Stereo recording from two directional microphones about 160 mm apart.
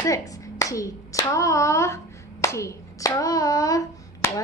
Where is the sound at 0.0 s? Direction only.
20° left (ahead or behind).